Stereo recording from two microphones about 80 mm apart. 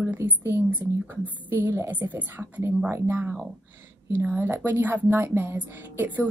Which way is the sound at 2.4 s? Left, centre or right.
Right.